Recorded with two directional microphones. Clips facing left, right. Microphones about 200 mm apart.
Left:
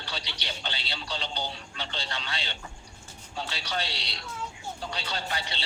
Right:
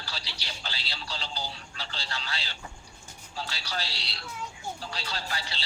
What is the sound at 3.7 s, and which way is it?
Speech, 30° left (ahead or behind).